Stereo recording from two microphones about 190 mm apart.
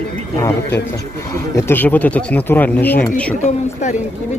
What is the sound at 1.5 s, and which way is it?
Speech, 10° left (ahead or behind).